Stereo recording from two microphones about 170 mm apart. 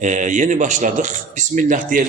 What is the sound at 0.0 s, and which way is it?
Speech, 45° right (ahead or behind).